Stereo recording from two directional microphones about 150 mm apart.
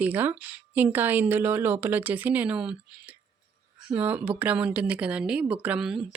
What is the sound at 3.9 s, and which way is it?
Speech, 10° right (ahead or behind).